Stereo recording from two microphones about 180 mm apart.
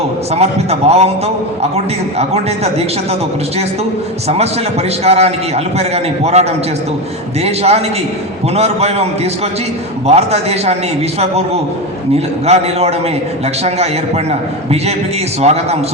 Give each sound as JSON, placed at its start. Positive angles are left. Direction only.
{"t": 0.3, "sound": "a man's voice", "side_deg": -35}
{"t": 4.3, "sound": "a man's voice", "side_deg": -35}